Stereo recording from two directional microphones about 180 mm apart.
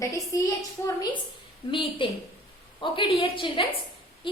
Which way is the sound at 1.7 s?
30° left (ahead or behind).